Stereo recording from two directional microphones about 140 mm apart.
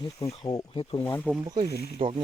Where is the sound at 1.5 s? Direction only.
40° right (ahead or behind).